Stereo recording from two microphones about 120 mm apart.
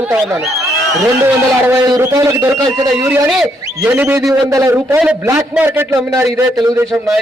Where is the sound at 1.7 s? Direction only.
25° right (ahead or behind).